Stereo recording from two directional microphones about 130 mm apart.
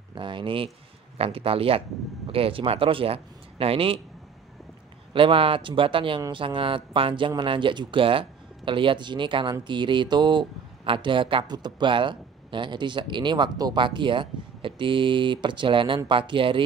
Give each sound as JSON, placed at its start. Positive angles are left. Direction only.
{"t": 0.1, "sound": "speech", "side_deg": -40}
{"t": 5.1, "sound": "speech", "side_deg": -45}